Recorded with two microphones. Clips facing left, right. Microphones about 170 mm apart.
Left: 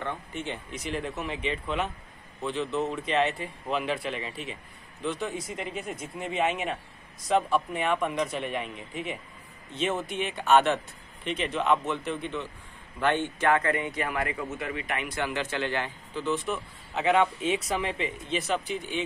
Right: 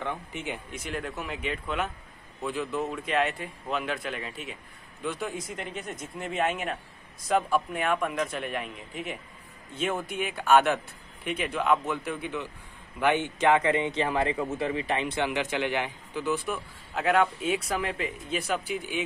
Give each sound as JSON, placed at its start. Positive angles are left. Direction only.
{"t": 0.0, "sound": "a man's voice", "side_deg": -10}